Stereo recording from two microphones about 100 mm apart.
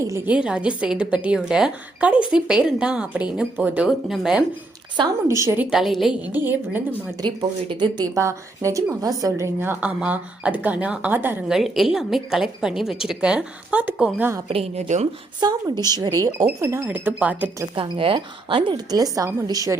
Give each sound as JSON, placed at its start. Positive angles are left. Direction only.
{"t": 0.3, "sound": "a woman's voice", "side_deg": -10}
{"t": 5.3, "sound": "a woman's voice", "side_deg": -30}
{"t": 5.5, "sound": "a woman's voice", "side_deg": -5}
{"t": 6.2, "sound": "a woman's voice", "side_deg": -20}
{"t": 7.2, "sound": "speech", "side_deg": -50}
{"t": 8.0, "sound": "a woman's voice", "side_deg": -30}
{"t": 9.6, "sound": "a woman's voice", "side_deg": -20}
{"t": 11.4, "sound": "a woman's voice", "side_deg": -5}
{"t": 14.4, "sound": "a woman's voice", "side_deg": -80}
{"t": 15.4, "sound": "a woman's voice", "side_deg": -45}
{"t": 16.8, "sound": "a woman's voice", "side_deg": -20}
{"t": 17.7, "sound": "speech", "side_deg": -60}
{"t": 18.7, "sound": "a woman's voice", "side_deg": -40}